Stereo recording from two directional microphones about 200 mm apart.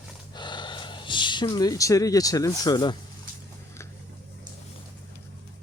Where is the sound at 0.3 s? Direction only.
20° left (ahead or behind).